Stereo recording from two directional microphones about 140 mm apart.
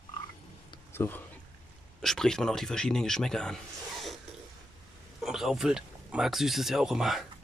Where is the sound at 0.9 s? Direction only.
15° left (ahead or behind).